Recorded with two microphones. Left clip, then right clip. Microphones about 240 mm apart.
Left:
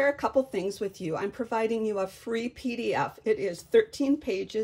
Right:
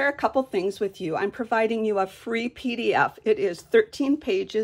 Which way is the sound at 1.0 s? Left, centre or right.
Centre.